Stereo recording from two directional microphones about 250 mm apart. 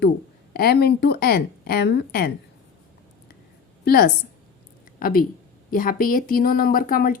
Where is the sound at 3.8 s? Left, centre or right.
Left.